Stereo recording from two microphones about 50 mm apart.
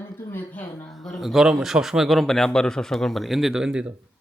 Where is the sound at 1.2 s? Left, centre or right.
Centre.